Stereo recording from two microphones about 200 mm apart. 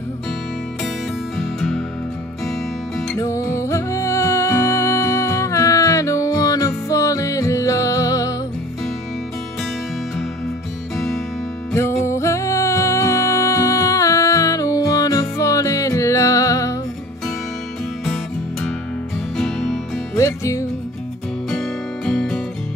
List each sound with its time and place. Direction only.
1.4 s music: centre (ahead or behind)
3.2 s music: 15° left (ahead or behind)
11.7 s music: 15° left (ahead or behind)
18.0 s music: centre (ahead or behind)
20.2 s music: 15° left (ahead or behind)
21.5 s music: centre (ahead or behind)